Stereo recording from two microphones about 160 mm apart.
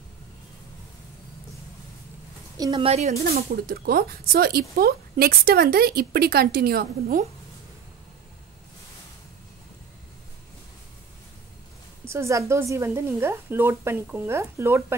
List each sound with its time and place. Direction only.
2.5 s a woman's voice: 20° right (ahead or behind)
2.8 s speech: 40° right (ahead or behind)
3.3 s speech: 70° right (ahead or behind)
12.0 s a woman's voice: 15° right (ahead or behind)